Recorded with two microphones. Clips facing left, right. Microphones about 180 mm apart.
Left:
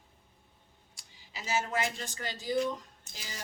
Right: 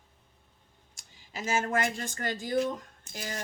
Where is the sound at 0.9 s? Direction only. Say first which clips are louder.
Right 6 dB; 50° right (ahead or behind).